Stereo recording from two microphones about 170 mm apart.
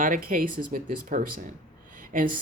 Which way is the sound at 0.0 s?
55° right (ahead or behind).